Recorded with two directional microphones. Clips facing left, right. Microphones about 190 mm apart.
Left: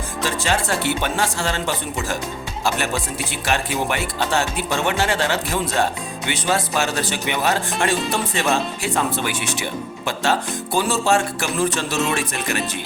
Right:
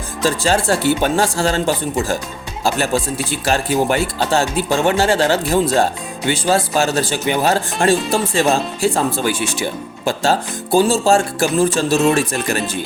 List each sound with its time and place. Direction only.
0.3 s speech: 35° right (ahead or behind)